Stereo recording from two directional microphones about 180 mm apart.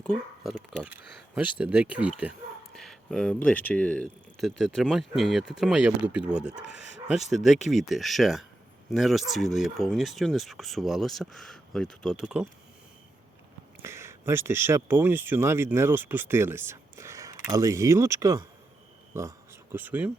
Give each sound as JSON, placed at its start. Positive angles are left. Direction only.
{"t": 0.0, "sound": "speech", "side_deg": 5}
{"t": 0.8, "sound": "speech", "side_deg": -10}
{"t": 13.8, "sound": "speech", "side_deg": -15}